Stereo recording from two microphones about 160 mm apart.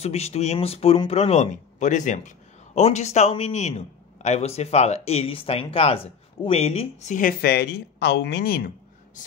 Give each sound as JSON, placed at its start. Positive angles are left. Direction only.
{"t": 0.0, "sound": "speech", "side_deg": 40}